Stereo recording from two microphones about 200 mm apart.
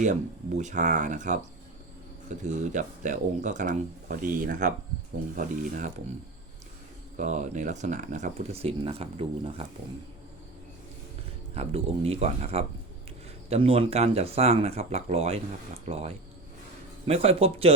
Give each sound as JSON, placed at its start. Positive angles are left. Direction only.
{"t": 0.0, "sound": "speech", "side_deg": -35}
{"t": 2.4, "sound": "speech", "side_deg": -40}
{"t": 7.2, "sound": "speech", "side_deg": -40}
{"t": 11.5, "sound": "speech", "side_deg": -30}